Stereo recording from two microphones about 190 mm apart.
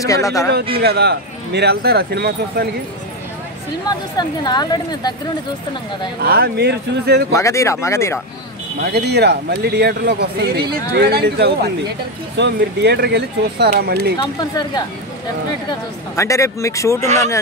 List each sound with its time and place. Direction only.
0.0 s speech: 15° left (ahead or behind)
0.7 s speech: 60° right (ahead or behind)
4.2 s a woman's voice: 20° left (ahead or behind)
6.2 s speech: 55° right (ahead or behind)
7.3 s speech: 15° left (ahead or behind)
8.8 s speech: 60° right (ahead or behind)
14.5 s a woman's voice: 20° left (ahead or behind)
16.2 s speech: 15° left (ahead or behind)